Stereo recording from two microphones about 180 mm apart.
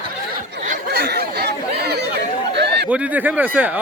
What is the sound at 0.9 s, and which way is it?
Chatter, 65° right (ahead or behind).